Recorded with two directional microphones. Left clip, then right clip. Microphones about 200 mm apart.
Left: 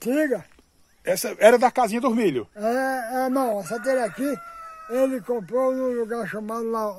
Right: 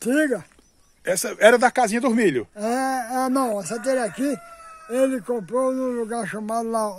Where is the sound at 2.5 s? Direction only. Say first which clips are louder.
Even; 55° right (ahead or behind).